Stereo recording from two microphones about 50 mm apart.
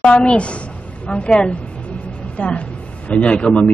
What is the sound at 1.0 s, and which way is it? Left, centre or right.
A man's voice, left.